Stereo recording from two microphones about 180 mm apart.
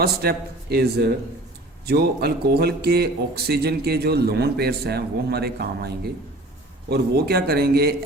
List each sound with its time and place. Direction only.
0.0 s a man's voice: 60° right (ahead or behind)
6.9 s a man's voice: 60° right (ahead or behind)